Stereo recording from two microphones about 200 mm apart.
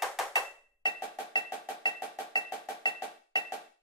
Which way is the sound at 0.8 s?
20° left (ahead or behind).